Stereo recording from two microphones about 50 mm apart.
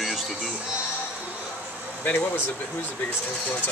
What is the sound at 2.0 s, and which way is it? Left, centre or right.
Speech, left.